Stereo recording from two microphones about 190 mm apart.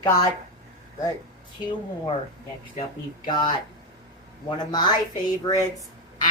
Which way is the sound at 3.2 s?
25° left (ahead or behind).